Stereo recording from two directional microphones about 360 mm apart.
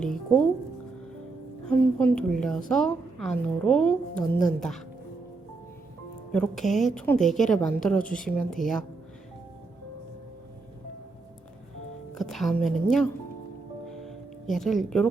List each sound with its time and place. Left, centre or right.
0.0 s a woman's voice: centre
1.6 s a woman's voice: centre
6.3 s a woman's voice: centre
12.1 s a woman's voice: centre
14.5 s a woman's voice: centre